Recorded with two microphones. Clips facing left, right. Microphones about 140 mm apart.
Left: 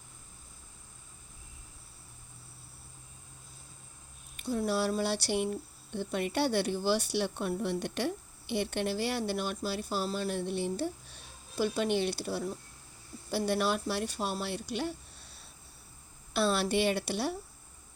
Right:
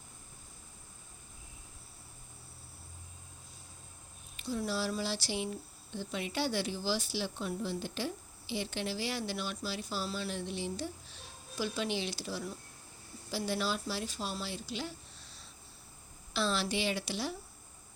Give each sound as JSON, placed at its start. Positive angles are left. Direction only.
{"t": 4.4, "sound": "speech", "side_deg": 55}
{"t": 16.3, "sound": "speech", "side_deg": 55}